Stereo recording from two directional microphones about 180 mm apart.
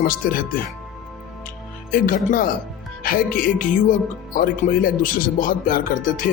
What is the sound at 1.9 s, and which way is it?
Speech, 50° left (ahead or behind).